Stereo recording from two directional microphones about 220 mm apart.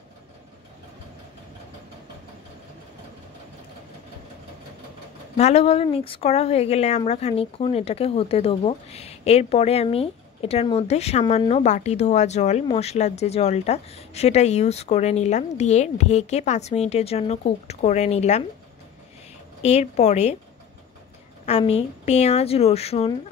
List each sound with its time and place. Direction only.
5.4 s speech: 25° left (ahead or behind)
19.6 s a woman's voice: 30° left (ahead or behind)
21.5 s speech: 30° left (ahead or behind)